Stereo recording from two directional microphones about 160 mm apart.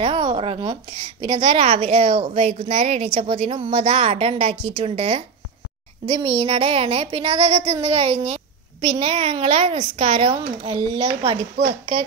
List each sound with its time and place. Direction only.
0.0 s a woman's voice: 35° right (ahead or behind)